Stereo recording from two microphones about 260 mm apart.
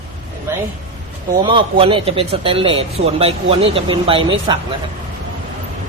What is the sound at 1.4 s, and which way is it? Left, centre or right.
Speech, centre.